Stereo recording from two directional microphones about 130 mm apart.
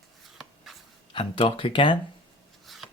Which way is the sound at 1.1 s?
40° left (ahead or behind).